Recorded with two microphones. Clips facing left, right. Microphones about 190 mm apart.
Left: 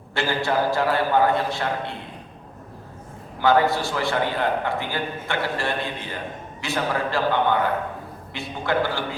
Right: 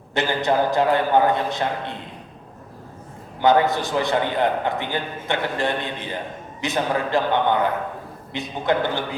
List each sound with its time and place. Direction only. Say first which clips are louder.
0.1 s a man's voice: right 2 dB; 20° right (ahead or behind)
3.4 s a man's voice: right 1 dB; 20° right (ahead or behind)